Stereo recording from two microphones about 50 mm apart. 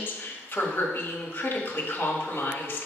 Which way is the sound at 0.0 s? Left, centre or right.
Left.